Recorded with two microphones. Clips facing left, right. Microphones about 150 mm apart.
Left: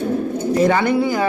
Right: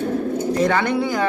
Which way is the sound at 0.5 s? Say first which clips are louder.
Left 4 dB; 5° left (ahead or behind).